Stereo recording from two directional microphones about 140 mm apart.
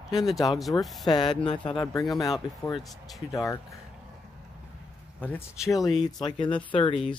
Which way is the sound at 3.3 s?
20° left (ahead or behind).